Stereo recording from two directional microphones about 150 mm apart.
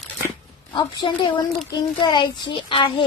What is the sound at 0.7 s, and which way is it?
A child's voice, 30° left (ahead or behind).